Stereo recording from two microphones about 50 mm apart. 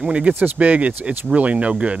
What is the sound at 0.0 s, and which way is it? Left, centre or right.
Speech, right.